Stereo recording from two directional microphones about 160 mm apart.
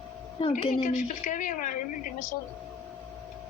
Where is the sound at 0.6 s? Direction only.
45° left (ahead or behind).